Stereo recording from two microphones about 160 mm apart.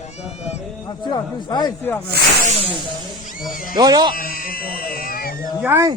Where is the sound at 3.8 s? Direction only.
25° right (ahead or behind).